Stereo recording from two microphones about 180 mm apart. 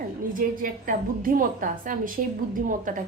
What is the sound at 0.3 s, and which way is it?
A woman's voice, 50° right (ahead or behind).